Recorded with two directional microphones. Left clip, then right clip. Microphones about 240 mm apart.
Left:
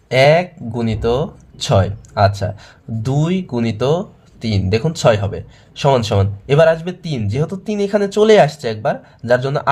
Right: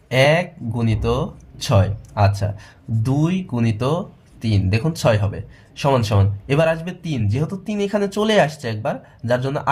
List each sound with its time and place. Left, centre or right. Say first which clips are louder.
0.1 s speech: left 5 dB; left